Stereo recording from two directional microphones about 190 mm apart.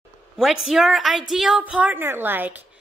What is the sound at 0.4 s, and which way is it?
A woman's voice, centre (ahead or behind).